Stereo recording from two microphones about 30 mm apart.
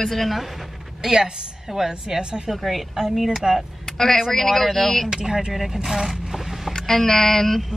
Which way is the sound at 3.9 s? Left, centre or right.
Centre.